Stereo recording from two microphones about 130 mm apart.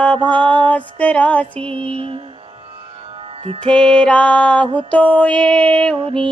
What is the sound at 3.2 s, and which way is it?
Music, 50° right (ahead or behind).